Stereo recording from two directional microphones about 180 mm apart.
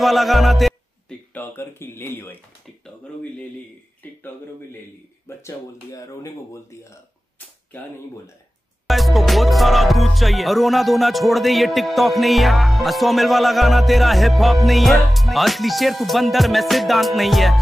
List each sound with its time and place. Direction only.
0.0 s music: centre (ahead or behind)
1.3 s speech: 10° left (ahead or behind)
5.4 s speech: 15° left (ahead or behind)
8.8 s music: centre (ahead or behind)